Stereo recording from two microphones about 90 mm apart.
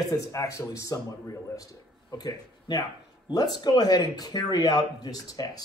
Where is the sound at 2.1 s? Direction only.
50° left (ahead or behind).